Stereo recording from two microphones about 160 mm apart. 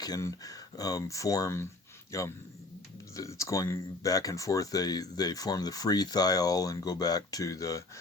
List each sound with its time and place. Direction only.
0.0 s speech: 20° left (ahead or behind)